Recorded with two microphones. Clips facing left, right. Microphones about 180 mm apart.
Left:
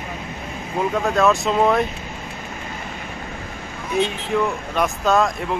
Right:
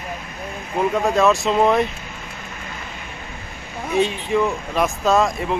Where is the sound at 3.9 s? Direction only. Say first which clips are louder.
Right 2 dB; centre (ahead or behind).